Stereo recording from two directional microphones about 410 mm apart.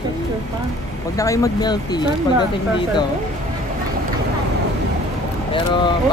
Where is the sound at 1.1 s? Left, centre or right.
Centre.